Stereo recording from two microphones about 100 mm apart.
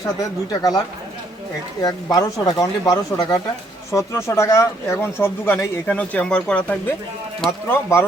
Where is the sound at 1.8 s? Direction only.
40° left (ahead or behind); by 6.9 s 15° left (ahead or behind).